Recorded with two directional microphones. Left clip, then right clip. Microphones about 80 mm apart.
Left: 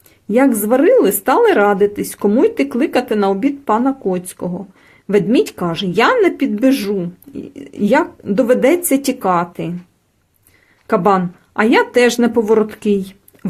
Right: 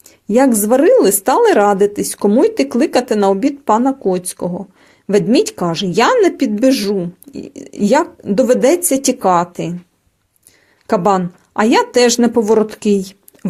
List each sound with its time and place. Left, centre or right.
0.3 s a woman's voice: right
10.8 s a woman's voice: right